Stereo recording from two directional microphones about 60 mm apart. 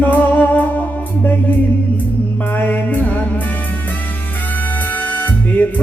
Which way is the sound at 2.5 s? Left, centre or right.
Left.